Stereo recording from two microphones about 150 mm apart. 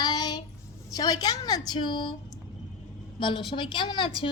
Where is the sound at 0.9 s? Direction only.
25° left (ahead or behind).